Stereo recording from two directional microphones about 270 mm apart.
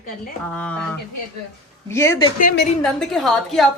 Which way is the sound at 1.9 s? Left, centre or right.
Centre.